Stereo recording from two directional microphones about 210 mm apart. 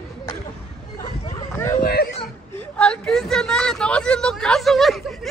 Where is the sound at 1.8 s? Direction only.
45° left (ahead or behind).